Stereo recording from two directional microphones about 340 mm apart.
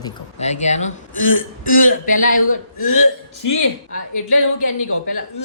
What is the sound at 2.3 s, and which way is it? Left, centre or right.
Speech, left.